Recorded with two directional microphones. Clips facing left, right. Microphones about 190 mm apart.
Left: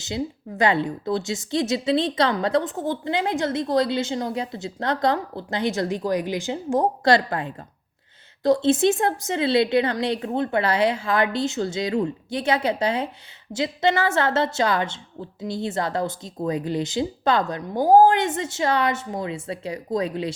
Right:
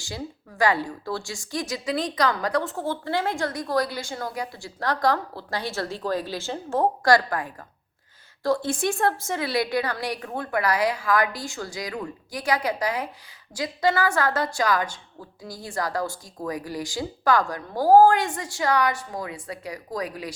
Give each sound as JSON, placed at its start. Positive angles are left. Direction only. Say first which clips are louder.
{"t": 0.0, "sound": "a woman's voice", "louder": "left 7 dB", "side_deg": 20}